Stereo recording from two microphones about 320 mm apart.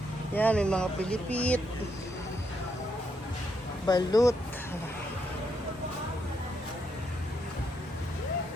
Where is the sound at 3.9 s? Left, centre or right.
Centre.